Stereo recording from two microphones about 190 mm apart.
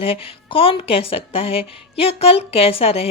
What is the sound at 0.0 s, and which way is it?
Speech, 30° left (ahead or behind).